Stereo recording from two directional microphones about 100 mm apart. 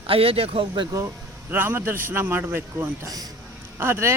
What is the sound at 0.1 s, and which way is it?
Speech, 75° right (ahead or behind).